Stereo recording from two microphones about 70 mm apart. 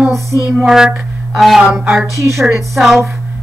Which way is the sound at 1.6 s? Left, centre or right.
Centre.